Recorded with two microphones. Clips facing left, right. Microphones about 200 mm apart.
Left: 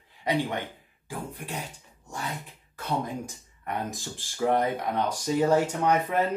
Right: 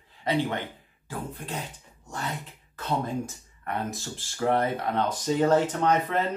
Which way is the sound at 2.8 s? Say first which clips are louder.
Right 2 dB; 15° left (ahead or behind).